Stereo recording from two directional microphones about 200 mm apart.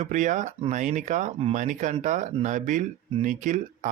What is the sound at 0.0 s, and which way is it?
Speech, 35° right (ahead or behind).